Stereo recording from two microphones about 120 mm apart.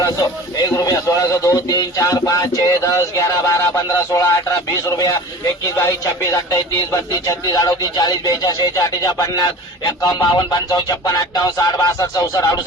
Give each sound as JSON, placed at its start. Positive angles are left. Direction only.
{"t": 0.0, "sound": "speech", "side_deg": 30}
{"t": 4.1, "sound": "a sound", "side_deg": 25}
{"t": 6.3, "sound": "speech", "side_deg": 30}